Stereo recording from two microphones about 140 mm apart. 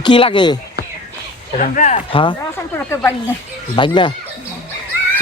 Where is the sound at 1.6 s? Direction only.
60° left (ahead or behind).